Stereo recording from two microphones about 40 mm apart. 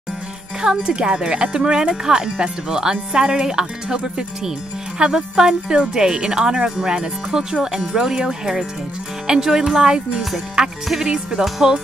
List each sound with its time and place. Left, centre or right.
0.6 s speech: right